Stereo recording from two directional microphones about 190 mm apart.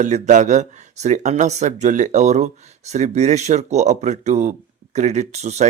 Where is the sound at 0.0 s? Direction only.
40° right (ahead or behind).